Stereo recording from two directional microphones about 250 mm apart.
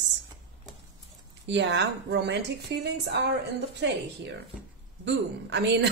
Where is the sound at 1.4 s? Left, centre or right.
Right.